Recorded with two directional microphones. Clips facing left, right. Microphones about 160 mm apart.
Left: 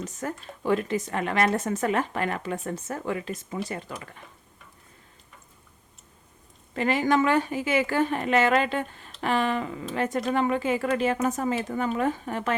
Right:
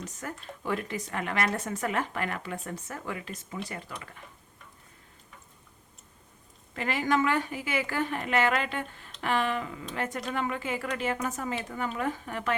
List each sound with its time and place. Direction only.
0.2 s speech: 25° left (ahead or behind)
6.7 s speech: 30° left (ahead or behind)